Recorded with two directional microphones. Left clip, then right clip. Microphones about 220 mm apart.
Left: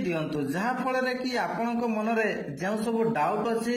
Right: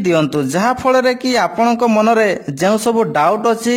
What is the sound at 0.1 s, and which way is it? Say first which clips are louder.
A man's voice: right 18 dB; 45° right (ahead or behind).